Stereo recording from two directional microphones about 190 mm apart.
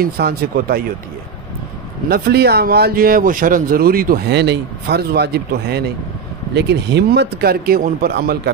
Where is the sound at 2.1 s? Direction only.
55° right (ahead or behind).